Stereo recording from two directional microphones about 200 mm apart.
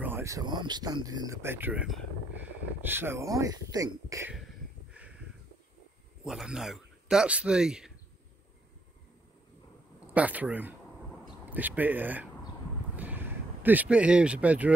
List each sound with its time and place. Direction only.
0.0 s speech: 10° right (ahead or behind)
6.2 s speech: 5° right (ahead or behind)
9.9 s speech: 10° right (ahead or behind)